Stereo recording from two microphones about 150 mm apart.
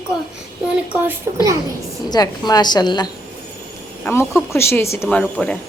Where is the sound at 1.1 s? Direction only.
20° right (ahead or behind).